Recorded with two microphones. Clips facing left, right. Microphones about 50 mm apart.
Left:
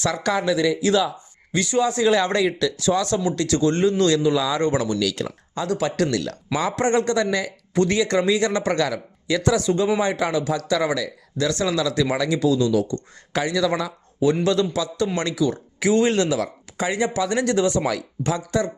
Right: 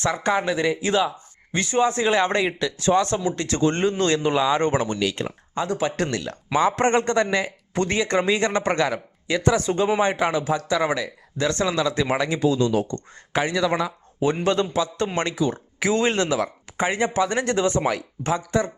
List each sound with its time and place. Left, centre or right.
0.0 s speech: right